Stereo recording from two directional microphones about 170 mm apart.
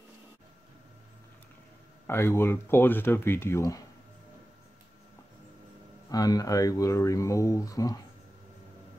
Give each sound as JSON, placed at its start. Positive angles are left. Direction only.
{"t": 2.0, "sound": "speech", "side_deg": 15}
{"t": 6.0, "sound": "speech", "side_deg": 20}